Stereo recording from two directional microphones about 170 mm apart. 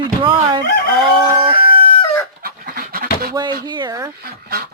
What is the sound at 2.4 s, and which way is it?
Chicken, 60° right (ahead or behind).